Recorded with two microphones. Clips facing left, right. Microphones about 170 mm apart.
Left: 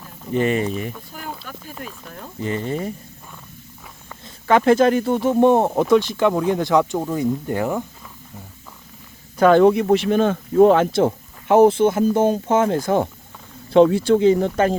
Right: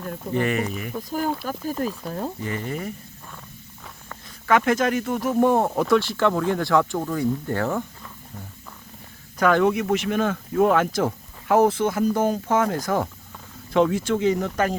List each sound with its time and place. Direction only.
0.3 s speech: 25° left (ahead or behind)
1.1 s speech: 40° right (ahead or behind)
2.4 s speech: 25° left (ahead or behind)
4.4 s speech: 30° left (ahead or behind); by 7.9 s 15° left (ahead or behind)
9.4 s speech: 30° left (ahead or behind)